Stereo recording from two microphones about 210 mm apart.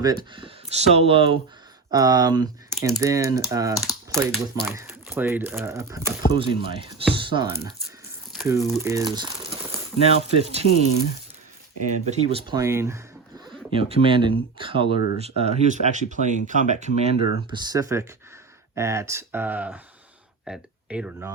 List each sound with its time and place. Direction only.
0.0 s speech: 20° right (ahead or behind)
3.8 s speech: centre (ahead or behind)
4.6 s speech: 10° right (ahead or behind)
6.3 s speech: 25° right (ahead or behind)
8.4 s speech: 15° right (ahead or behind); by 10.6 s 30° right (ahead or behind)
11.9 s speech: 30° right (ahead or behind); by 13.0 s 10° right (ahead or behind)
13.7 s speech: 25° right (ahead or behind)
14.8 s speech: 45° left (ahead or behind)
15.4 s speech: 30° right (ahead or behind)
17.5 s speech: 20° right (ahead or behind)